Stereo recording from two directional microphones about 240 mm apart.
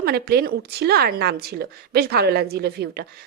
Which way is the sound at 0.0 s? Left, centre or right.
Right.